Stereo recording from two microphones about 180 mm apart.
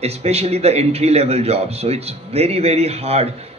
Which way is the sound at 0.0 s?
35° right (ahead or behind).